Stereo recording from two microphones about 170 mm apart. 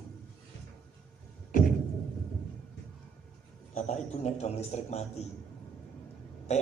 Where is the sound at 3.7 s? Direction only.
45° left (ahead or behind).